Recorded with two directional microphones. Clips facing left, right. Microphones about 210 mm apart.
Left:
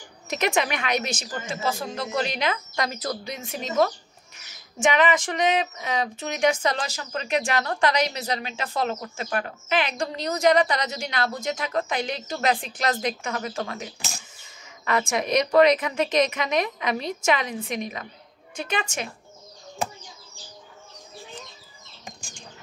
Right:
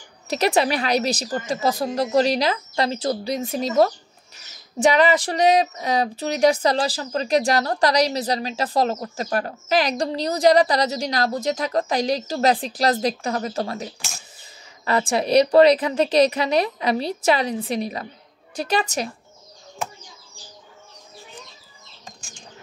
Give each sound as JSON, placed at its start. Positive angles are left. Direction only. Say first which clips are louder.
{"t": 0.3, "sound": "speech", "louder": "right 5 dB", "side_deg": -35}